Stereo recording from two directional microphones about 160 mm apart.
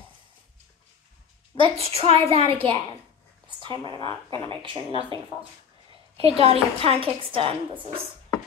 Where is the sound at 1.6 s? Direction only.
40° right (ahead or behind).